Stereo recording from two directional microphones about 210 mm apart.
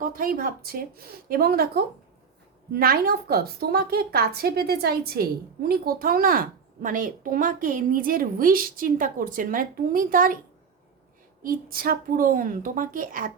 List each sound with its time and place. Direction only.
0.0 s a woman's voice: 40° right (ahead or behind)
11.4 s a woman's voice: 45° right (ahead or behind)